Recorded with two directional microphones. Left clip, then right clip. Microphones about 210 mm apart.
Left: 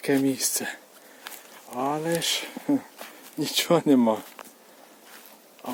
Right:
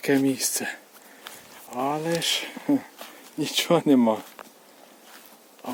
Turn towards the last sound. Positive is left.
turn(degrees=-5)  # may be behind; listen again after turning